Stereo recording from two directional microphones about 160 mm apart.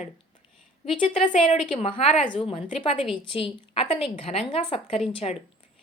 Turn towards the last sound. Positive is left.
turn(degrees=40)  # may be behind; listen again after turning